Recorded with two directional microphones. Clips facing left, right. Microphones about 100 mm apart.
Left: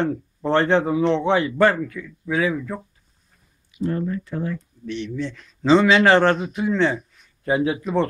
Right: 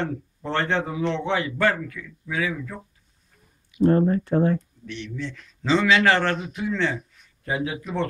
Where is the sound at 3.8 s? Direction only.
45° right (ahead or behind).